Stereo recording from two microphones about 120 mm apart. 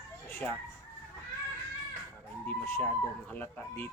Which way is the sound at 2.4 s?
15° left (ahead or behind).